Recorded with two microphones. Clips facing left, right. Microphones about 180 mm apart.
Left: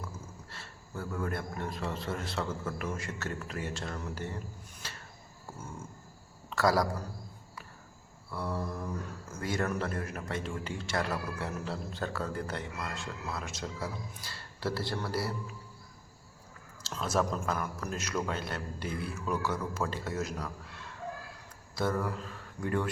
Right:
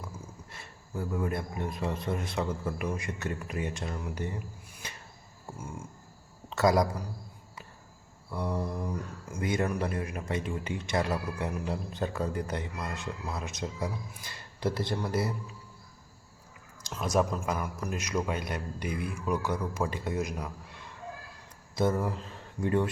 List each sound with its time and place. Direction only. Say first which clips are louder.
0.5 s a man's voice: right 4 dB; 15° right (ahead or behind)
6.5 s a man's voice: right 3 dB; 20° right (ahead or behind)
8.3 s a man's voice: right 3 dB; 15° right (ahead or behind)
16.8 s a man's voice: right 3 dB; 15° right (ahead or behind)
21.8 s speech: right 3 dB; 20° right (ahead or behind)